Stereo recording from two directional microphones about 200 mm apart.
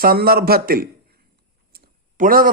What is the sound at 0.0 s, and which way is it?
A man's voice, 50° right (ahead or behind).